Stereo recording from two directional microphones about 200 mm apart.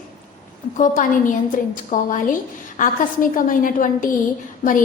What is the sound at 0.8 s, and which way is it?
A woman's voice, 40° left (ahead or behind).